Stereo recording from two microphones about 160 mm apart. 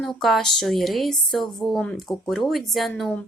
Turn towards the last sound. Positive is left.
turn(degrees=0)  # may be behind; listen again after turning